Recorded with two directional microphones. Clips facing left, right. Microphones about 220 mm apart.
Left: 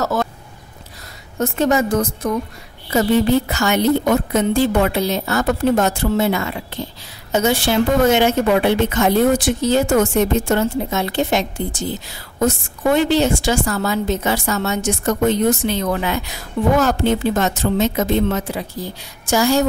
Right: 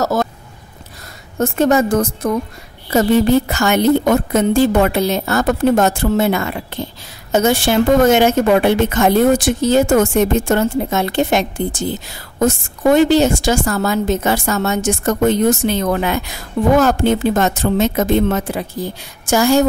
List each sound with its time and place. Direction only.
0.0 s speech: 40° right (ahead or behind)
1.4 s a woman's voice: 45° right (ahead or behind)